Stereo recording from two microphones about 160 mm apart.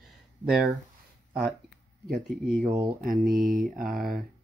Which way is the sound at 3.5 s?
60° right (ahead or behind).